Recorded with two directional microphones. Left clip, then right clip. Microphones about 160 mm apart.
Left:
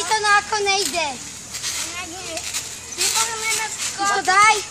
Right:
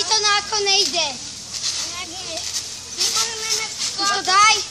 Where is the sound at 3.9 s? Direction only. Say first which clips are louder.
Left 1 dB; 35° right (ahead or behind).